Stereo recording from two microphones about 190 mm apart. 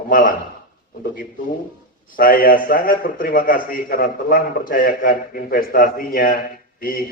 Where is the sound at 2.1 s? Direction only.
45° left (ahead or behind).